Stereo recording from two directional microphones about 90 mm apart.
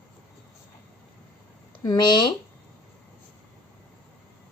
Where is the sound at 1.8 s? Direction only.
55° left (ahead or behind).